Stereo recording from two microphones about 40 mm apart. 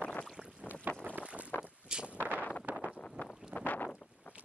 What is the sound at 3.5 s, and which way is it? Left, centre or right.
Boat, left.